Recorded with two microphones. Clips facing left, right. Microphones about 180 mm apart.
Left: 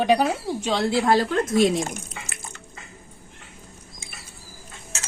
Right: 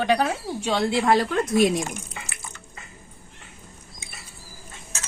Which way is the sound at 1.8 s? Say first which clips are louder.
Left 1 dB; 40° left (ahead or behind).